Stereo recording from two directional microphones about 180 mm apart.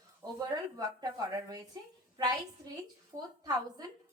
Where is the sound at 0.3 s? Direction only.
20° right (ahead or behind).